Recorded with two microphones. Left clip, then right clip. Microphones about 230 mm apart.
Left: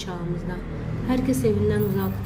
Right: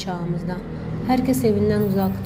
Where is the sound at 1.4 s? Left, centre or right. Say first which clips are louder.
Right 3 dB; left.